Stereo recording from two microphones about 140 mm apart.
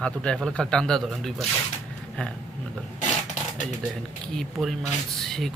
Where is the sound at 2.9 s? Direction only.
60° left (ahead or behind).